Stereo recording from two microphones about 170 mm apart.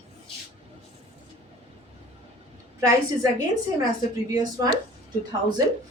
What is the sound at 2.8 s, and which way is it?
Speech, 20° right (ahead or behind).